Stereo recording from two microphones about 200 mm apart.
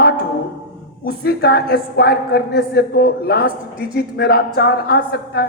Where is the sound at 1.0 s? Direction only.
50° left (ahead or behind).